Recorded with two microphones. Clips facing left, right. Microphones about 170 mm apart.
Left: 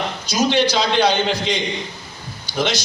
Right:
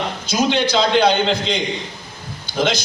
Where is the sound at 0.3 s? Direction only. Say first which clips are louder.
Left 1 dB; 55° right (ahead or behind).